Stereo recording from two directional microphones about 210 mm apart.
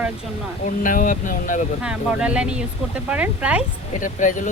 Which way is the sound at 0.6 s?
40° left (ahead or behind).